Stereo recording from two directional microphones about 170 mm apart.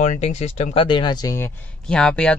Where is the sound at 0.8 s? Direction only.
25° left (ahead or behind).